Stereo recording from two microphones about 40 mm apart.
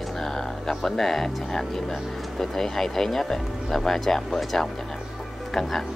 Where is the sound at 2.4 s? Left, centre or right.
Centre.